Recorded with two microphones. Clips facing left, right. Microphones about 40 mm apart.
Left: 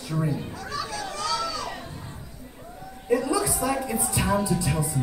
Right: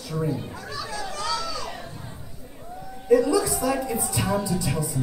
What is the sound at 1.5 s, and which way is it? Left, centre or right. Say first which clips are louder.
Music: left 1 dB; centre.